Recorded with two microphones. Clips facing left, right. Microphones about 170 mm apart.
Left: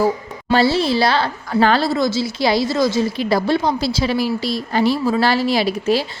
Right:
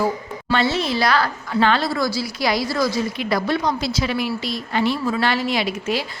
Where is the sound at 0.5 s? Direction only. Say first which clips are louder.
Left 5 dB; 35° left (ahead or behind).